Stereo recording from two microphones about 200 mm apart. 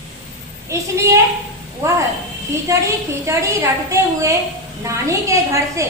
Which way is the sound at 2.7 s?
15° right (ahead or behind).